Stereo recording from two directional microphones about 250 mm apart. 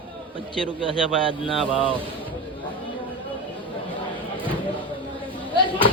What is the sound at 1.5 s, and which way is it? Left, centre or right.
Speech, centre.